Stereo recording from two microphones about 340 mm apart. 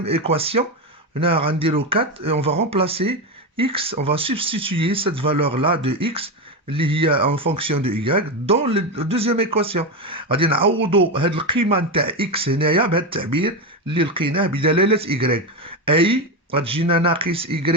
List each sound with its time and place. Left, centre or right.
0.0 s speech: centre